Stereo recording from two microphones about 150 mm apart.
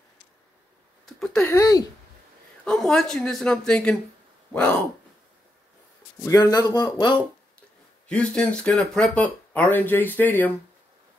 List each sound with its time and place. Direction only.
1.0 s a sound: centre (ahead or behind)
1.4 s speech: 20° left (ahead or behind)
2.6 s speech: 5° left (ahead or behind)
6.2 s speech: 25° left (ahead or behind)
8.1 s speech: 5° left (ahead or behind)